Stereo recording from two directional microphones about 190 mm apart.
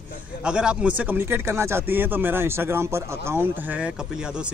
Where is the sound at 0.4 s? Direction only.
5° right (ahead or behind).